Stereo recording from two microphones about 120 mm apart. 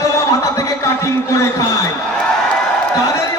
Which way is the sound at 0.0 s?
25° left (ahead or behind).